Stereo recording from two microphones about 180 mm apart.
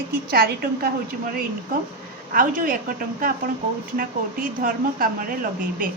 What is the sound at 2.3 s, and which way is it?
Speech, 50° right (ahead or behind).